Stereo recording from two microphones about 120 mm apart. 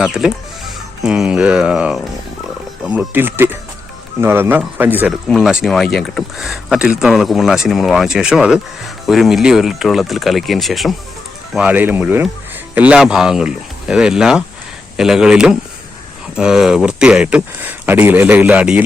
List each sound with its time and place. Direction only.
0.0 s speech: 5° right (ahead or behind)
3.1 s speech: 15° right (ahead or behind); by 10.9 s centre (ahead or behind)
11.5 s speech: 10° right (ahead or behind)